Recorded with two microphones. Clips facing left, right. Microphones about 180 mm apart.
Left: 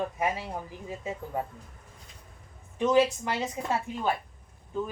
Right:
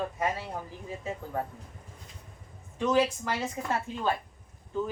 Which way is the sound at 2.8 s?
20° left (ahead or behind).